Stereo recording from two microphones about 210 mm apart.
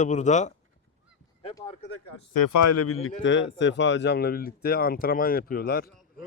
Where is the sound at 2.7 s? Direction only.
90° left; by 5.9 s 45° left (ahead or behind).